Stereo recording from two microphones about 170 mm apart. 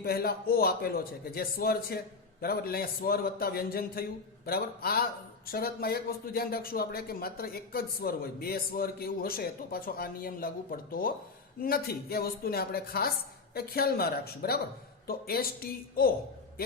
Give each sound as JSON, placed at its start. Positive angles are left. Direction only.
{"t": 0.0, "sound": "a man's voice", "side_deg": 65}